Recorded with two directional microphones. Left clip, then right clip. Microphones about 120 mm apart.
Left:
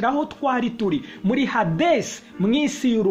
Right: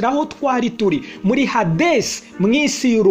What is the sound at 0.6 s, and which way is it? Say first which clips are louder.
Speech: right 5 dB; 40° right (ahead or behind).